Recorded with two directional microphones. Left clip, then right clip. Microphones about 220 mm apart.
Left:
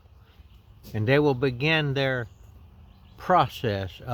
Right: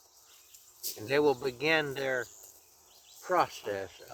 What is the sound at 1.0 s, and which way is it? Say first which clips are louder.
Speech: left 5 dB; 25° left (ahead or behind).